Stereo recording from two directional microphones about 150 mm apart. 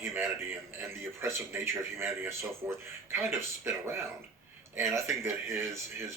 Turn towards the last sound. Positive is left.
turn(degrees=-15)  # may be behind; listen again after turning